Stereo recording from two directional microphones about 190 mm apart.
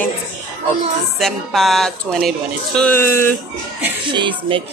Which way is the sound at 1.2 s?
Centre (ahead or behind).